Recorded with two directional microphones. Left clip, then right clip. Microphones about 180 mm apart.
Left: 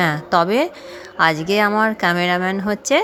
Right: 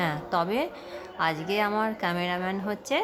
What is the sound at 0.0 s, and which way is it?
Speech, 30° left (ahead or behind).